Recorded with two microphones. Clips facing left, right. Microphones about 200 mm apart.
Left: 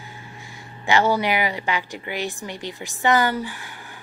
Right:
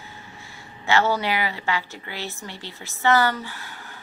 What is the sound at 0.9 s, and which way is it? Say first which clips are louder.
A woman's voice: left 2 dB; 15° left (ahead or behind).